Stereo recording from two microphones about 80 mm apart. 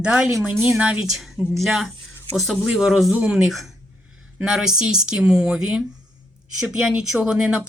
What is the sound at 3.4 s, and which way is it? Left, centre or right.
Speech, centre.